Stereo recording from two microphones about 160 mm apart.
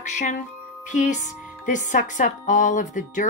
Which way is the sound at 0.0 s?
50° left (ahead or behind).